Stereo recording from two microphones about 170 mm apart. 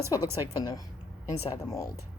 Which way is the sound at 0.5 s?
20° left (ahead or behind).